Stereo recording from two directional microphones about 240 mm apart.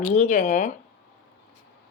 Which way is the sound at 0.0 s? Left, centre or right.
Left.